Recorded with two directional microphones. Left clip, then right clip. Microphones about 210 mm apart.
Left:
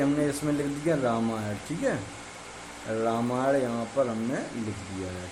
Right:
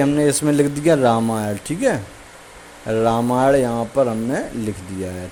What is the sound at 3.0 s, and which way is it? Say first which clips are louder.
Speech: right 10 dB; 35° right (ahead or behind).